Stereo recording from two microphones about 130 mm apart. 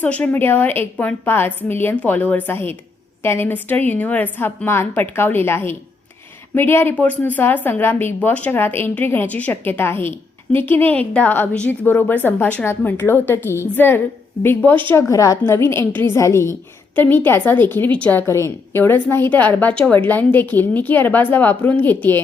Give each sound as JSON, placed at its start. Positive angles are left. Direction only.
{"t": 0.0, "sound": "a woman's voice", "side_deg": 10}